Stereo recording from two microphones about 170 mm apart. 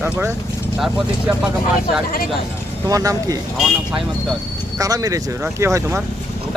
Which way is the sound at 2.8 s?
20° right (ahead or behind).